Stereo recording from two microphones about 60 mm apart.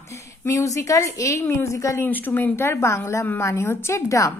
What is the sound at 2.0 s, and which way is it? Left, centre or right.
Speech, left.